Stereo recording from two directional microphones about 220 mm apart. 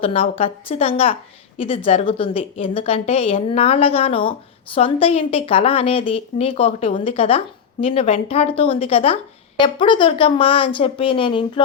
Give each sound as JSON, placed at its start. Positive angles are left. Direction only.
{"t": 0.0, "sound": "a woman's voice", "side_deg": 25}